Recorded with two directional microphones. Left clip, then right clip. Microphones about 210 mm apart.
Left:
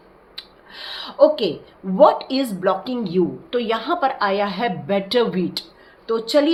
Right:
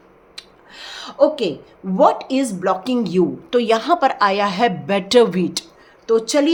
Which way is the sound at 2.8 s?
45° right (ahead or behind).